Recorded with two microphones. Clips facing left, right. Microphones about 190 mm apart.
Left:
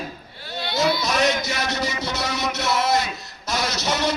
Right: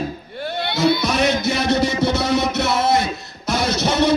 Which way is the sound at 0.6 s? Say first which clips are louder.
Right 4 dB; 60° right (ahead or behind).